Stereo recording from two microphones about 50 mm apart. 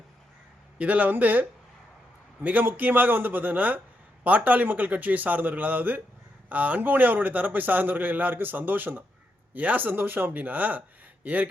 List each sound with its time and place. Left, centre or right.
0.8 s a man's voice: right